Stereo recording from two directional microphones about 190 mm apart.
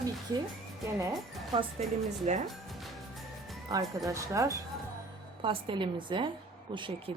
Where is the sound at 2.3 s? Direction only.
35° right (ahead or behind).